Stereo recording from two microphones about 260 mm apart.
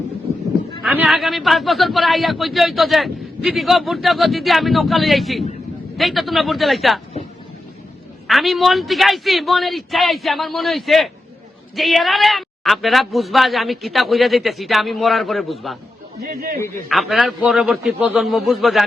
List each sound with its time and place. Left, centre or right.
0.8 s a man's voice: centre
8.3 s a man's voice: centre
16.2 s speech: right
16.9 s a man's voice: centre